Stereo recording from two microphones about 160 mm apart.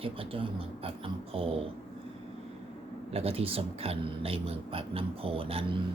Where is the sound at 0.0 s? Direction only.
35° right (ahead or behind).